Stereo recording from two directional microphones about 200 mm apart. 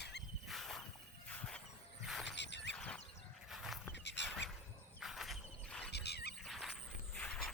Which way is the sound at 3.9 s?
60° left (ahead or behind).